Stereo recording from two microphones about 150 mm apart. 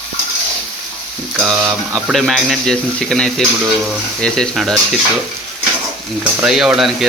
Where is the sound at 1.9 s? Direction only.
Centre (ahead or behind).